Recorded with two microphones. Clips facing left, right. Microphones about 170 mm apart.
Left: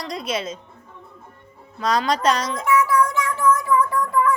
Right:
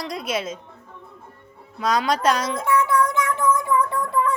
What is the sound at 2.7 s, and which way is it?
Music, 25° right (ahead or behind).